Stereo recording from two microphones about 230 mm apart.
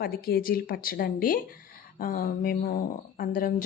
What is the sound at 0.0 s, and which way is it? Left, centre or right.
Speech, left.